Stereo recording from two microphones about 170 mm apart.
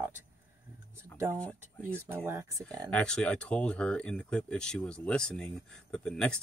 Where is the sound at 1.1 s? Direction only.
15° right (ahead or behind).